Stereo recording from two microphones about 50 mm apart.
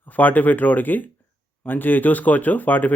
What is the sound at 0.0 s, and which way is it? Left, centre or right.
Speech, left.